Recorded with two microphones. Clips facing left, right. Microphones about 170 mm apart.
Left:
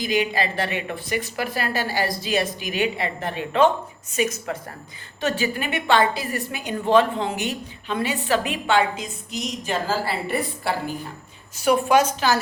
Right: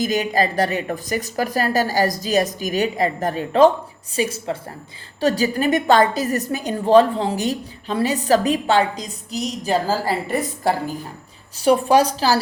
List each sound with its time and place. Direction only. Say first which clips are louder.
0.0 s a woman's voice: right 3 dB; 45° right (ahead or behind)